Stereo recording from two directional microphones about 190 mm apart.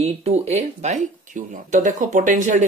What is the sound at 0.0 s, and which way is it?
Speech, 35° right (ahead or behind).